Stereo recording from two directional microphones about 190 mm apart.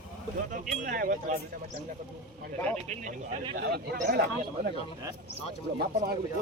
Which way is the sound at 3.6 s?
55° right (ahead or behind).